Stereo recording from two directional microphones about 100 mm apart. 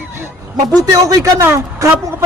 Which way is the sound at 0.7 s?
35° right (ahead or behind).